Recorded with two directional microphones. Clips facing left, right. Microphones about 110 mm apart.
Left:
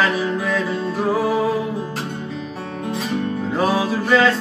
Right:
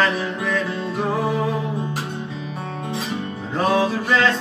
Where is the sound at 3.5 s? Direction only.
5° left (ahead or behind).